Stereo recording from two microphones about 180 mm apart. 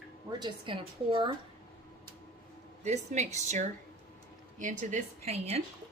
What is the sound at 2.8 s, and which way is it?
Speech, 40° right (ahead or behind).